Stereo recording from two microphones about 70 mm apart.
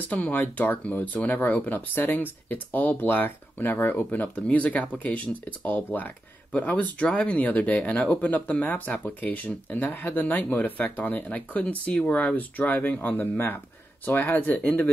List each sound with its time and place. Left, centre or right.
0.0 s speech: left